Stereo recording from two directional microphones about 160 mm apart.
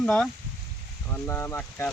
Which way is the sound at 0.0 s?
5° left (ahead or behind).